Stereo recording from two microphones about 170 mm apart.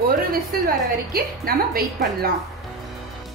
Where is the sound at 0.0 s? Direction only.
60° right (ahead or behind).